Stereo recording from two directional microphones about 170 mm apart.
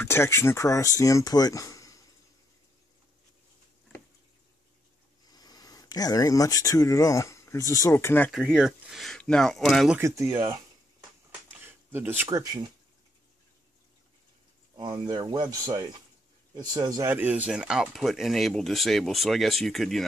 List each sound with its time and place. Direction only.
0.0 s speech: 15° left (ahead or behind)
5.2 s speech: 20° left (ahead or behind)
8.3 s speech: centre (ahead or behind)
9.9 s speech: 15° right (ahead or behind)
11.6 s speech: 10° right (ahead or behind)
14.8 s speech: 25° right (ahead or behind)
17.1 s speech: 10° right (ahead or behind)